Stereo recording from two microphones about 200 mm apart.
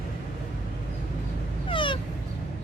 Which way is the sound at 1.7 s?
25° left (ahead or behind).